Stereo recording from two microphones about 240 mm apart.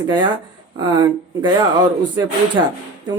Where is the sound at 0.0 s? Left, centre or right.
Centre.